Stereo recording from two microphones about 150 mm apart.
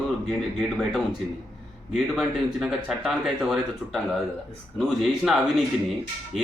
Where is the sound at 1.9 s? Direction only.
Centre (ahead or behind).